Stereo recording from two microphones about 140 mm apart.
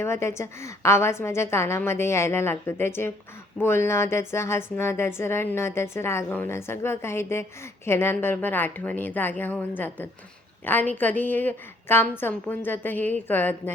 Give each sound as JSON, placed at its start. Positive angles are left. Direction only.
{"t": 0.0, "sound": "a woman's voice", "side_deg": 20}